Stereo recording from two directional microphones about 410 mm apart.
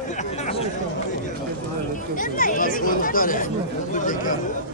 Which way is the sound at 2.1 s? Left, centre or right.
Centre.